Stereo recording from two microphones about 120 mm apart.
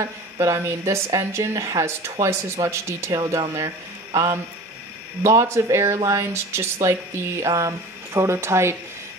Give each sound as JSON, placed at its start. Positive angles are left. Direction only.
{"t": 0.0, "sound": "a woman's voice", "side_deg": -25}